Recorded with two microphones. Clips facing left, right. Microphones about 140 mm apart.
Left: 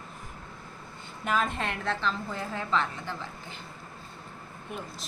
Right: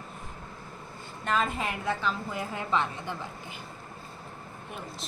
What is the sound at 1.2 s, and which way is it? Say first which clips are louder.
A woman's voice: even; centre (ahead or behind).